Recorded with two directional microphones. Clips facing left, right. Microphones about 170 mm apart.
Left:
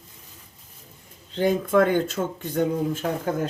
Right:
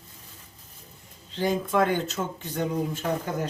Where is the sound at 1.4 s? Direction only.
55° left (ahead or behind).